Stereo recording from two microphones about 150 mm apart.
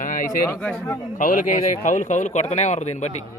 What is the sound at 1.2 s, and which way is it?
A man's voice, 60° left (ahead or behind).